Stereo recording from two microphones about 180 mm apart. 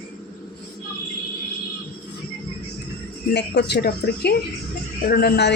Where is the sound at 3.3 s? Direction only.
70° left (ahead or behind).